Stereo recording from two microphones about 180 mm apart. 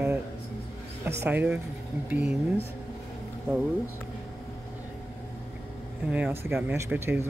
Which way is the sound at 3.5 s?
5° right (ahead or behind).